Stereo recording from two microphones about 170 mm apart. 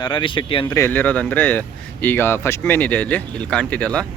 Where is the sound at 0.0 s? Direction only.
30° left (ahead or behind).